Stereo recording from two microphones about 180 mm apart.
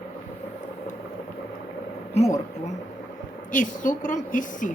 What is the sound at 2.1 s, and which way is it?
A woman's voice, 40° left (ahead or behind).